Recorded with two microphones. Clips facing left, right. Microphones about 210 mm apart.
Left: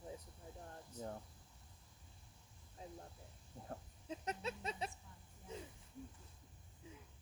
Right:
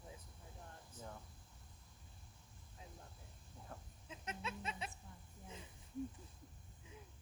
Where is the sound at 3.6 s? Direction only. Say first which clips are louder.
Left 7 dB; 40° left (ahead or behind).